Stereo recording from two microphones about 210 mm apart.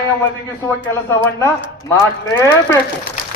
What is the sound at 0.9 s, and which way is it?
A man's voice, 10° left (ahead or behind).